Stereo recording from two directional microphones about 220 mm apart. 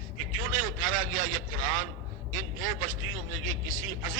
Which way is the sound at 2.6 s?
65° right (ahead or behind).